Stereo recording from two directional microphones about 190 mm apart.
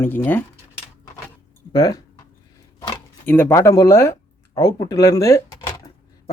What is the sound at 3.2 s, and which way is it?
Speech, 10° left (ahead or behind).